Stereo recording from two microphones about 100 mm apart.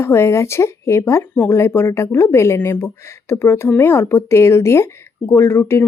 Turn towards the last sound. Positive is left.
turn(degrees=25)  # may be behind; listen again after turning